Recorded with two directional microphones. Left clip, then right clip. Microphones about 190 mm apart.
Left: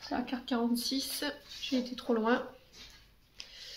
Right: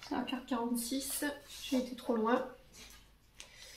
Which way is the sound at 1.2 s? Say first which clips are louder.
Left 1 dB; 45° left (ahead or behind).